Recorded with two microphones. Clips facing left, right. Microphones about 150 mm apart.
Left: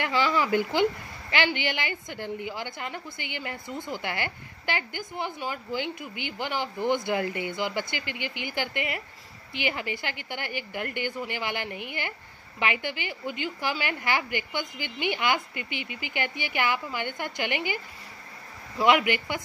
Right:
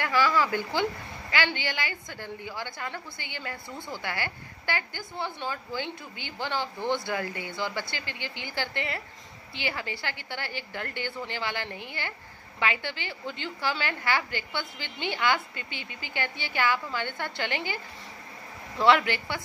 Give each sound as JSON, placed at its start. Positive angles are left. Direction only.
{"t": 0.0, "sound": "a woman's voice", "side_deg": 20}
{"t": 18.8, "sound": "a woman's voice", "side_deg": 15}